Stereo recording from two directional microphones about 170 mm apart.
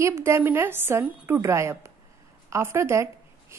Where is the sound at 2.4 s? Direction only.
15° right (ahead or behind).